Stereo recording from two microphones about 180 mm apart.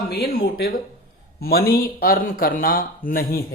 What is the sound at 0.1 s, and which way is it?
Speech, 60° left (ahead or behind).